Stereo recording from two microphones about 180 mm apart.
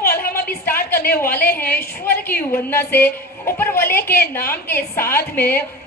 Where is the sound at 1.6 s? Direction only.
10° left (ahead or behind).